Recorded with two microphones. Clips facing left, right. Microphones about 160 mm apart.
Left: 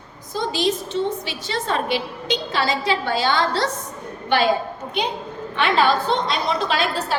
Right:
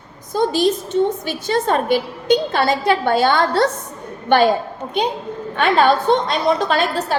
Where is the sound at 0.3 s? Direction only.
45° right (ahead or behind).